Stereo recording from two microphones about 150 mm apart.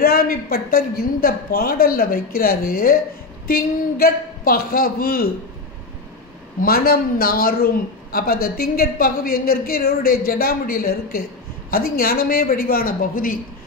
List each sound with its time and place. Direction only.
0.0 s a man's voice: 90° left
6.6 s a man's voice: 80° left